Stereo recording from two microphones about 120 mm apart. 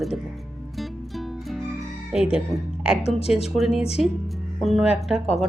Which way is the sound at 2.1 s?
5° right (ahead or behind).